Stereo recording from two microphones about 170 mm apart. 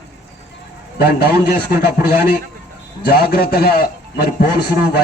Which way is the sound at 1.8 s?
60° left (ahead or behind).